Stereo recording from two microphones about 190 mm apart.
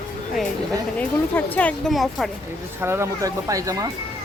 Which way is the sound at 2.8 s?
15° right (ahead or behind).